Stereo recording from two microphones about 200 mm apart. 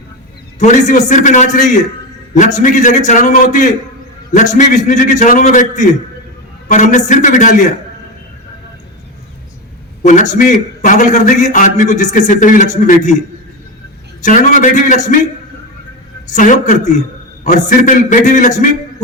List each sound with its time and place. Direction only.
0.6 s a man's voice: 35° left (ahead or behind)
10.0 s a man's voice: 40° left (ahead or behind)
14.3 s a man's voice: 40° left (ahead or behind)
16.3 s a man's voice: 40° left (ahead or behind)